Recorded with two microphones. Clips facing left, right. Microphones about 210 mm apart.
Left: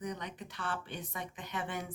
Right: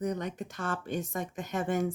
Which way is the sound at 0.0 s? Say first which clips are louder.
Right 8 dB; 45° right (ahead or behind).